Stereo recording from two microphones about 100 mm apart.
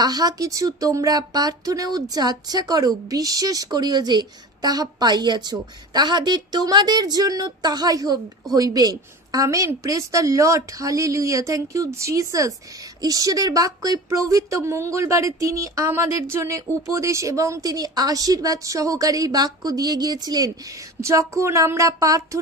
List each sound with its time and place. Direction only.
0.0 s speech: 40° right (ahead or behind)
21.0 s speech: 30° right (ahead or behind)